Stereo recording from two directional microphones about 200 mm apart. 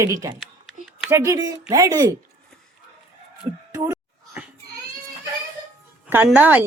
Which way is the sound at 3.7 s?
15° right (ahead or behind).